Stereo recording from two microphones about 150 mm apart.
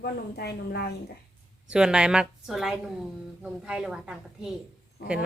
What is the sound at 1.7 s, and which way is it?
A woman's voice, 5° right (ahead or behind).